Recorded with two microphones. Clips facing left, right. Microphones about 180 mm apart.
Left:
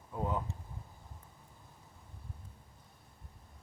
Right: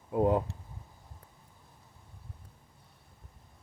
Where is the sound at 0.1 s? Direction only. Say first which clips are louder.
Right 10 dB; 65° right (ahead or behind).